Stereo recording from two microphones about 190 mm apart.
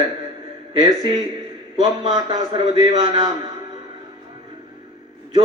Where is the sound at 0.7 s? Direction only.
30° right (ahead or behind).